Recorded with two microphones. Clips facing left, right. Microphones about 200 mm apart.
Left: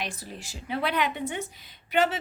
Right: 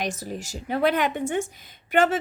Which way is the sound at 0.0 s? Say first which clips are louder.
Right 6 dB; 45° right (ahead or behind).